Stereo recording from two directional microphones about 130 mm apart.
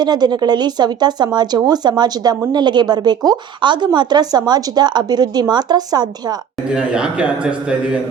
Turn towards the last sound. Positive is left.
turn(degrees=-10)  # may be behind; listen again after turning